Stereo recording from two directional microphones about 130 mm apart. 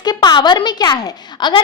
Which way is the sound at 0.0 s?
35° left (ahead or behind).